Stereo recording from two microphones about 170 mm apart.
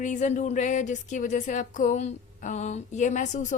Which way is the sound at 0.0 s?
45° left (ahead or behind).